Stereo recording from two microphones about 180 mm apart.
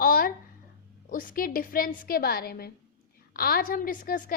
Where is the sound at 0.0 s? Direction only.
55° left (ahead or behind).